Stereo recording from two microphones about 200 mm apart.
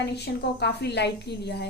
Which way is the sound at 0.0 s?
55° left (ahead or behind).